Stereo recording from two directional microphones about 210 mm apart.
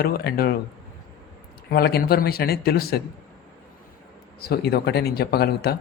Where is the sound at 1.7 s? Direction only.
50° left (ahead or behind).